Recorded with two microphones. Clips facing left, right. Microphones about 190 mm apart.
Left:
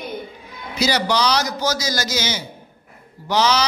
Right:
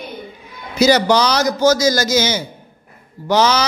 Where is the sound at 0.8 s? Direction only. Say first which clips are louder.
Right 7 dB; 45° right (ahead or behind).